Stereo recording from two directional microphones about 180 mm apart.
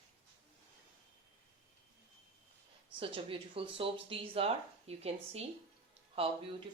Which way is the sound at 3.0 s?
30° right (ahead or behind).